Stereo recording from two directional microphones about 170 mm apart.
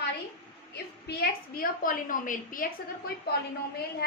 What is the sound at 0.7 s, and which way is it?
A woman's voice, 70° left (ahead or behind).